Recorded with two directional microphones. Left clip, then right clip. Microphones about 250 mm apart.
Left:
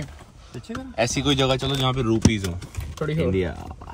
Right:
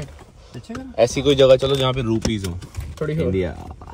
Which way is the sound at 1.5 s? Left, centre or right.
Left.